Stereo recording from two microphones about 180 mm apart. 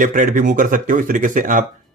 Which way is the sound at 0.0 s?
45° right (ahead or behind).